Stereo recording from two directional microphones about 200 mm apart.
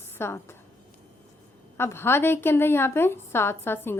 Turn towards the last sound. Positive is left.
turn(degrees=10)  # may be behind; listen again after turning